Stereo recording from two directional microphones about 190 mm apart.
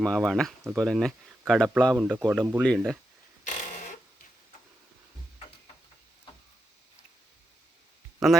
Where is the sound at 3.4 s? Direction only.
40° left (ahead or behind).